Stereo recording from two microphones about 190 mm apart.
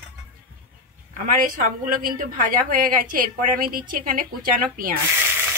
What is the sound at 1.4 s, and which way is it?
A woman's voice, 45° right (ahead or behind).